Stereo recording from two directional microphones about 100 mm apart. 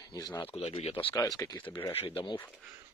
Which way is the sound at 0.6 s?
90° left.